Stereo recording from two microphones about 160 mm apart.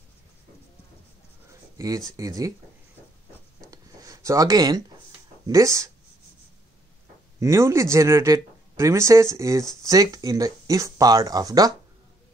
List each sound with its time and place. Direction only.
1.8 s speech: 20° right (ahead or behind)
3.7 s writing: 20° right (ahead or behind)
5.5 s speech: 20° right (ahead or behind)
7.3 s a man's voice: 20° right (ahead or behind)